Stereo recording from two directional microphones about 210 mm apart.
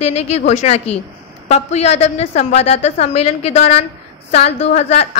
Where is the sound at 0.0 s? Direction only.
30° left (ahead or behind).